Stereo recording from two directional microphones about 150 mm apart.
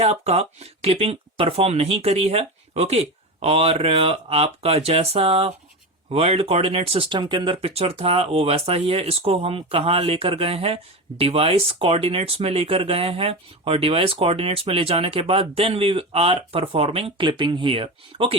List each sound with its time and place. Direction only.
0.0 s speech: 45° right (ahead or behind)